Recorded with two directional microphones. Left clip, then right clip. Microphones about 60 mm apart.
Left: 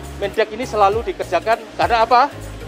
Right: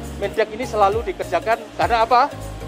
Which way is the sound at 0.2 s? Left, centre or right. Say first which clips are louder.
Left 2 dB; left.